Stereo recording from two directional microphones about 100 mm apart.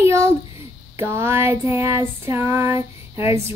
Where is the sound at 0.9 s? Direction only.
25° right (ahead or behind).